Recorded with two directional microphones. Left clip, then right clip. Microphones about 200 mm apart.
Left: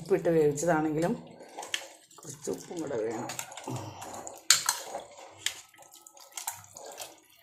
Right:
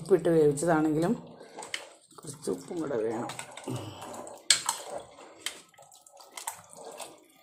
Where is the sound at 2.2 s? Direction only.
10° right (ahead or behind).